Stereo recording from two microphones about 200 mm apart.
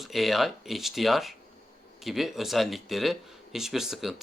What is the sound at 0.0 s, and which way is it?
Speech, centre (ahead or behind).